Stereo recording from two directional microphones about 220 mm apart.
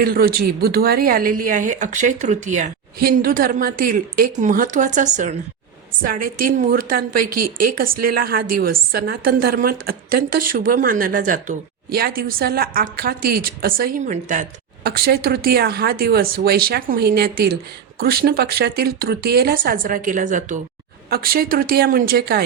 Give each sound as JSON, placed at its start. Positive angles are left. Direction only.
{"t": 0.0, "sound": "a woman's voice", "side_deg": -45}
{"t": 14.8, "sound": "speech", "side_deg": -45}